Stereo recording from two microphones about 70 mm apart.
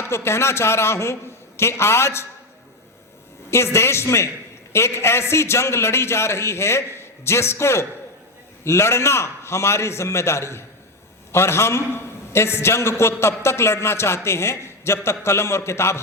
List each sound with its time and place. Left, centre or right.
0.0 s a man's voice: left
3.5 s a man's voice: left